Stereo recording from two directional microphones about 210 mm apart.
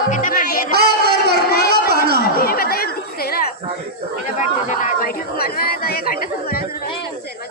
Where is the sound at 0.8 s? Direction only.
50° right (ahead or behind).